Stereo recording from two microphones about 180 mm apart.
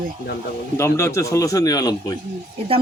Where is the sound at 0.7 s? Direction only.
15° left (ahead or behind).